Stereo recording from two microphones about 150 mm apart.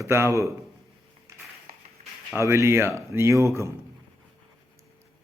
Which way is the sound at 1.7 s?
90° right.